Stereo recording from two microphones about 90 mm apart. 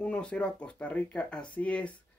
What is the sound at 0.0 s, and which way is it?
Speech, 15° left (ahead or behind).